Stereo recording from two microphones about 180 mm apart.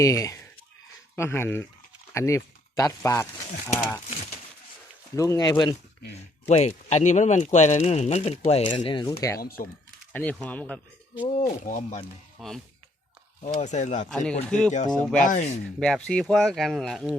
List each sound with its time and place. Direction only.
0.0 s speech: 15° left (ahead or behind)
5.1 s speech: 15° left (ahead or behind)
6.5 s speech: 35° left (ahead or behind); by 9.4 s 20° left (ahead or behind)
9.4 s speech: 55° left (ahead or behind)
10.1 s speech: 10° left (ahead or behind)
11.4 s speech: 45° left (ahead or behind)
12.4 s speech: centre (ahead or behind)
13.4 s speech: 40° left (ahead or behind)
14.1 s speech: centre (ahead or behind)
15.2 s speech: 45° left (ahead or behind)
15.8 s speech: 5° left (ahead or behind)